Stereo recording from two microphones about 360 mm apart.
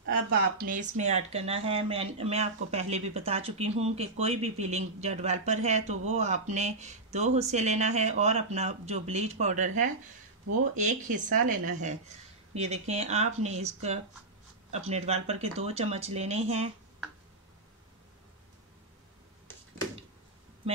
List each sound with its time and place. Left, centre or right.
0.0 s speech: right